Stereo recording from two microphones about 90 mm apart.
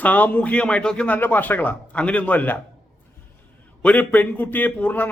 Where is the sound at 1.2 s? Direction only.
20° left (ahead or behind).